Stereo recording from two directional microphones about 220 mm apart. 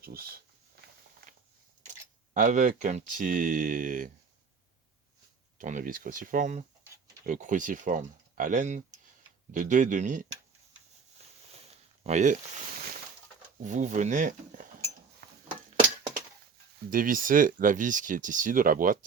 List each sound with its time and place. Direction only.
0.0 s speech: 45° right (ahead or behind)
2.3 s speech: 35° right (ahead or behind)
5.5 s speech: 35° right (ahead or behind)
12.0 s speech: 30° right (ahead or behind)
13.6 s speech: 35° right (ahead or behind)
15.2 s a sound: 45° right (ahead or behind)
16.9 s speech: 40° right (ahead or behind)